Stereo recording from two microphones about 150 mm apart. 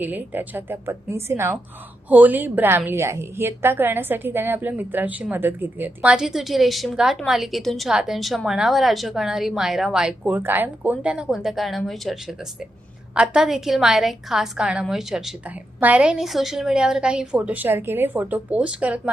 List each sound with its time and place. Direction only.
0.0 s a woman's voice: 10° right (ahead or behind)